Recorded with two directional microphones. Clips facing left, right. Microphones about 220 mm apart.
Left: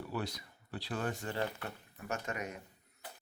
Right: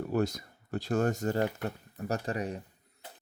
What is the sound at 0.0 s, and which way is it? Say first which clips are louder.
Speech: right 10 dB; 45° right (ahead or behind).